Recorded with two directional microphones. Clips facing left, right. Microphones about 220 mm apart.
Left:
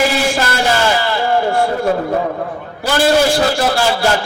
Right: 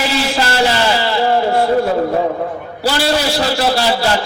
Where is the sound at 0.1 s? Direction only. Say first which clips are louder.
Even; 50° left (ahead or behind).